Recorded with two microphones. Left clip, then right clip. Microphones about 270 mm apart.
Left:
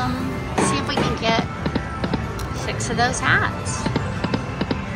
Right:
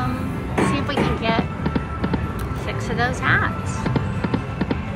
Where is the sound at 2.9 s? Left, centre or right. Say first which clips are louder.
Left 1 dB; centre.